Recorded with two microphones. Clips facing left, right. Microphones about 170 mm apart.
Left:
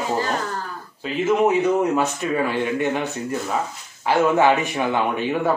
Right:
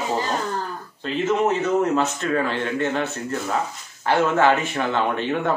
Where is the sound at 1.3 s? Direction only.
10° left (ahead or behind).